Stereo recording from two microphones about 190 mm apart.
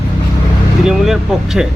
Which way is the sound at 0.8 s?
Centre (ahead or behind).